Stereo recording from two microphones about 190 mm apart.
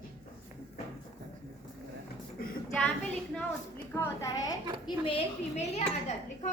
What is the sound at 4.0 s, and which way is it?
Speech, 15° left (ahead or behind).